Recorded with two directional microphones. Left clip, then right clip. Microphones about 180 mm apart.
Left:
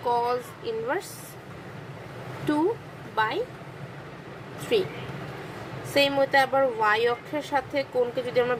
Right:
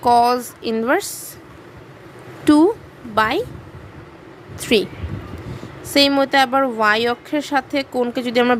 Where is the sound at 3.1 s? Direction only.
65° right (ahead or behind).